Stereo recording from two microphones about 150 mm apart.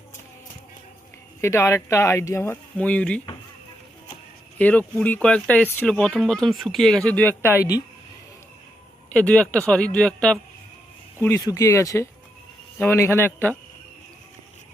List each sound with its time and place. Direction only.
1.4 s speech: 15° left (ahead or behind)
4.5 s speech: 10° left (ahead or behind)
9.1 s speech: 5° left (ahead or behind)
11.2 s speech: 20° left (ahead or behind)